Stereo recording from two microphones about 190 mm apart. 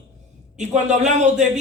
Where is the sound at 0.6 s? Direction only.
40° right (ahead or behind).